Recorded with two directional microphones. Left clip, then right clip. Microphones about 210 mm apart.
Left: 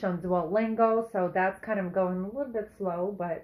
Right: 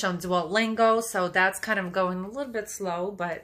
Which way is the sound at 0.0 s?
30° right (ahead or behind).